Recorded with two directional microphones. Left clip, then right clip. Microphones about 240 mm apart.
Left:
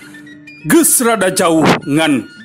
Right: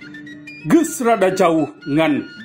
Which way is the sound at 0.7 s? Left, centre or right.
Left.